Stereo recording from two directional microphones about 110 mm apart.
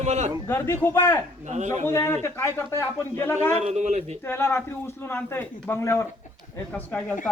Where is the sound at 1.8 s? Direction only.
25° left (ahead or behind).